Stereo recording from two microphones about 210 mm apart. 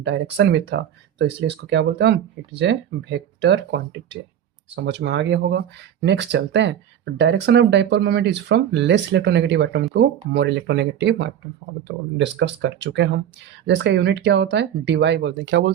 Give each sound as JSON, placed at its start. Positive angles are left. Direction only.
{"t": 0.0, "sound": "speech", "side_deg": -55}